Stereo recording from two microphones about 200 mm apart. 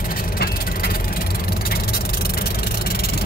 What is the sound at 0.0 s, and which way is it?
Vehicle, 45° left (ahead or behind).